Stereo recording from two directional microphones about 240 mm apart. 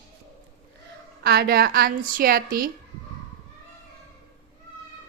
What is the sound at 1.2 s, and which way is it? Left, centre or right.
A woman's voice, right.